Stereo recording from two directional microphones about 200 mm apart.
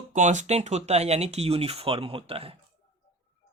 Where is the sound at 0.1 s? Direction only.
35° right (ahead or behind).